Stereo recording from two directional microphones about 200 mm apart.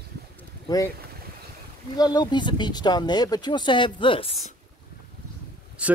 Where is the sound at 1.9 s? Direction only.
20° left (ahead or behind).